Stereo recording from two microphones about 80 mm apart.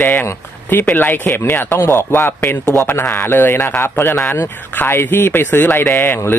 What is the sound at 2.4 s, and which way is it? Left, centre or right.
Speech, centre.